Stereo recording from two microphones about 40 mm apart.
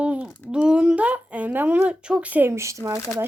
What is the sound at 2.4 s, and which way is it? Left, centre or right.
Speech, right.